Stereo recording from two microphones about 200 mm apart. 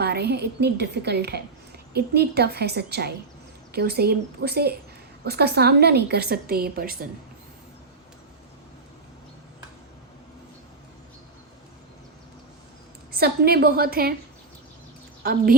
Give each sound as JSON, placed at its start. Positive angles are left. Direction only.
{"t": 0.0, "sound": "a woman's voice", "side_deg": -55}
{"t": 13.1, "sound": "a woman's voice", "side_deg": -50}
{"t": 15.2, "sound": "a woman's voice", "side_deg": -50}